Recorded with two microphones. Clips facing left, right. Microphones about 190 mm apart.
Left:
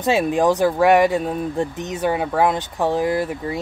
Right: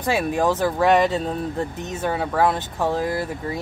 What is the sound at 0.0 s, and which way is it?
Speech, 20° left (ahead or behind).